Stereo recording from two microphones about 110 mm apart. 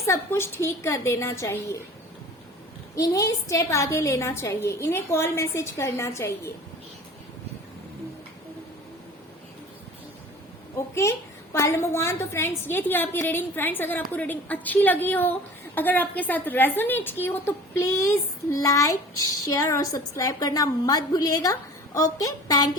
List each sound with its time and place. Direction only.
0.1 s a woman's voice: 25° left (ahead or behind)
2.9 s a woman's voice: 30° left (ahead or behind)
10.8 s a sound: 25° left (ahead or behind)
11.5 s a woman's voice: 25° left (ahead or behind)